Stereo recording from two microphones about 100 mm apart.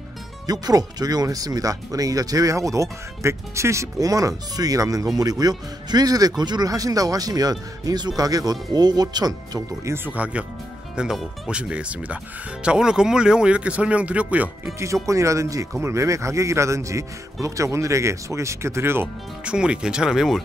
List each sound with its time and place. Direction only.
0.5 s speech: 40° right (ahead or behind)
10.0 s speech: 15° right (ahead or behind)
15.0 s speech: 30° right (ahead or behind)
19.4 s speech: 10° right (ahead or behind)